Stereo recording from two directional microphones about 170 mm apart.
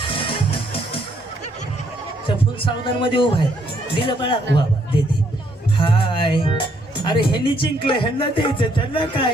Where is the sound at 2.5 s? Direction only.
30° left (ahead or behind).